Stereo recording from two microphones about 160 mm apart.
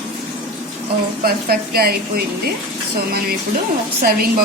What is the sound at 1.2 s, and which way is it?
A woman's voice, 70° right (ahead or behind).